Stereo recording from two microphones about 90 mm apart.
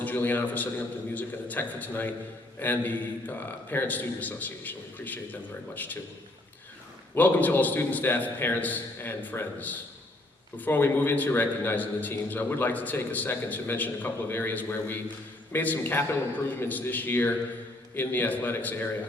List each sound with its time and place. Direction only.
0.0 s a man's voice: 20° left (ahead or behind)
7.2 s a man's voice: 20° left (ahead or behind)